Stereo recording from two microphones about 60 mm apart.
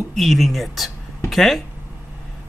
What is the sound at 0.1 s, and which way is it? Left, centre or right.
Speech, centre.